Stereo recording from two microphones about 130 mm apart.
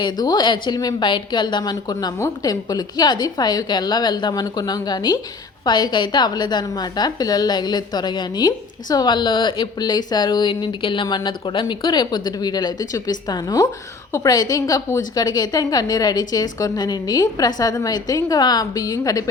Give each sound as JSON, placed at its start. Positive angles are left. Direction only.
{"t": 0.0, "sound": "a woman's voice", "side_deg": 30}